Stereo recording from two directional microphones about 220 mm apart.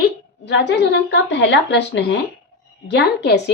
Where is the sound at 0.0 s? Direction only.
50° left (ahead or behind).